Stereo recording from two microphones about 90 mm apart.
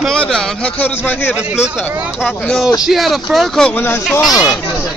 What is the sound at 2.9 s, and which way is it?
Speech, centre (ahead or behind).